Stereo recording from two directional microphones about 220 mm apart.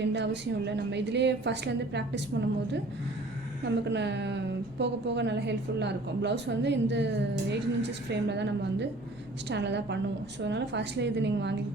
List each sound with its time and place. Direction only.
0.0 s a woman's voice: 50° right (ahead or behind)
3.6 s a woman's voice: 50° right (ahead or behind)